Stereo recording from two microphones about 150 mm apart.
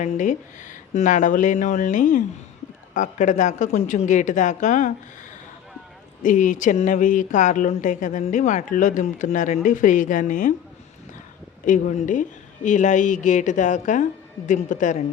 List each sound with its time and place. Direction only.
0.0 s a woman's voice: 55° left (ahead or behind)
6.2 s a woman's voice: 60° left (ahead or behind)
11.6 s a woman's voice: 60° left (ahead or behind)